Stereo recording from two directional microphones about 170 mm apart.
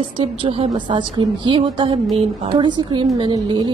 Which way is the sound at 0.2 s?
35° right (ahead or behind).